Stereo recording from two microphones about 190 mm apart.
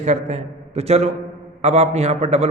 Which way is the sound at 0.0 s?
35° right (ahead or behind).